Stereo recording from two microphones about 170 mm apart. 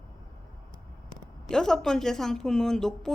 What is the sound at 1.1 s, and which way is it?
Speech, 5° left (ahead or behind).